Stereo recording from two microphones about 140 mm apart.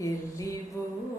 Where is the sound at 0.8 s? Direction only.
20° left (ahead or behind).